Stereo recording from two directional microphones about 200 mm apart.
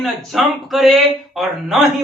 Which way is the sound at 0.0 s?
Centre (ahead or behind).